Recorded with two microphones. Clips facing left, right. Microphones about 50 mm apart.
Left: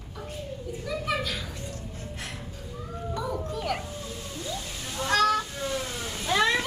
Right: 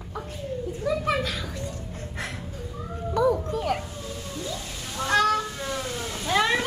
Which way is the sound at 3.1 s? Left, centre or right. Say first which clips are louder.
Right 10 dB; right.